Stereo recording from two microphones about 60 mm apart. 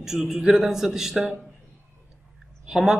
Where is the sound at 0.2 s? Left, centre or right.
Centre.